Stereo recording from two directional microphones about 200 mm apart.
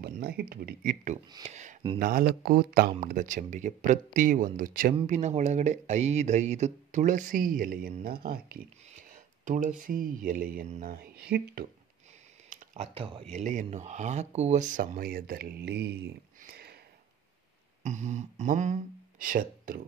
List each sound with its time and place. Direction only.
0.0 s speech: 50° right (ahead or behind)
1.3 s speech: 35° right (ahead or behind)
2.0 s speech: 45° right (ahead or behind)
12.4 s a sound: 35° right (ahead or behind)
13.3 s speech: 35° right (ahead or behind); by 16.7 s 50° right (ahead or behind)
17.8 s speech: 35° right (ahead or behind)